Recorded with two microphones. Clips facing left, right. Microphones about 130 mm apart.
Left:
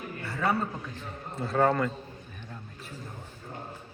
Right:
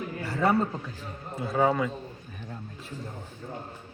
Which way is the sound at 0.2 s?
35° right (ahead or behind).